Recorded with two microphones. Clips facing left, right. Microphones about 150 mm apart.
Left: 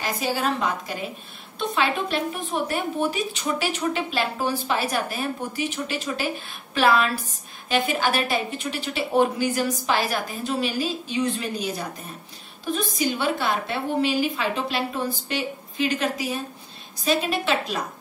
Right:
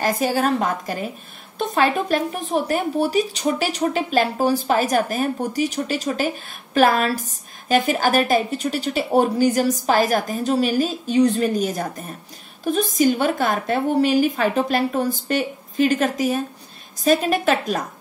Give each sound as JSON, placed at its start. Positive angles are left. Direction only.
{"t": 0.0, "sound": "a woman's voice", "side_deg": -45}
{"t": 12.9, "sound": "a woman's voice", "side_deg": -45}